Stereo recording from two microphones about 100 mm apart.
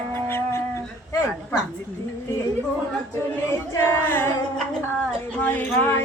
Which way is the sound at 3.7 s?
25° left (ahead or behind).